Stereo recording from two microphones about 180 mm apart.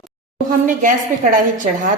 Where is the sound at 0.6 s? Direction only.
50° right (ahead or behind).